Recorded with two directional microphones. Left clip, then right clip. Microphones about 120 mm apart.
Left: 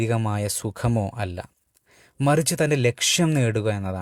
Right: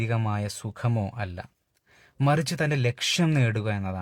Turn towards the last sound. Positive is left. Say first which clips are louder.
# left 5 dB
turn(degrees=30)  # may be behind; listen again after turning